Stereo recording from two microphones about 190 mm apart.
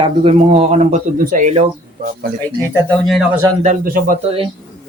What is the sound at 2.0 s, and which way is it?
Speech, 50° right (ahead or behind).